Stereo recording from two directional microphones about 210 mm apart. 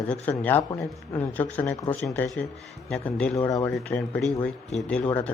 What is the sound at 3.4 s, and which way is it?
Speech, 15° left (ahead or behind).